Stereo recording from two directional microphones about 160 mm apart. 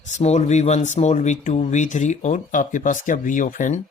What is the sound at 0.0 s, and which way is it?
Speech, 45° left (ahead or behind).